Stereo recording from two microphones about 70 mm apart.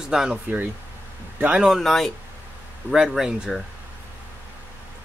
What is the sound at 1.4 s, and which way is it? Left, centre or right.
Speech, centre.